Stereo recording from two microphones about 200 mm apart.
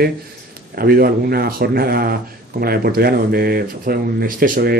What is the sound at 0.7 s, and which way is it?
Speech, 50° right (ahead or behind).